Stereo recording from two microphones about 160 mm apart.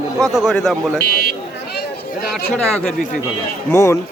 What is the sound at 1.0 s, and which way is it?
Speech, 75° left (ahead or behind).